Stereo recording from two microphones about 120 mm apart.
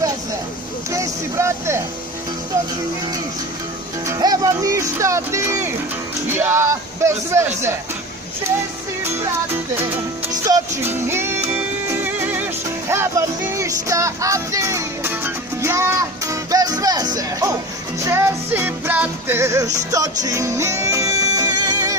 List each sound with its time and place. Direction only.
0.9 s speech: 25° right (ahead or behind)
4.0 s speech: 30° right (ahead or behind)
10.3 s music: 30° right (ahead or behind)
10.8 s speech: 20° right (ahead or behind)
11.9 s music: 15° right (ahead or behind); by 17.5 s 30° right (ahead or behind)
18.0 s music: 20° right (ahead or behind)
19.4 s music: 25° right (ahead or behind)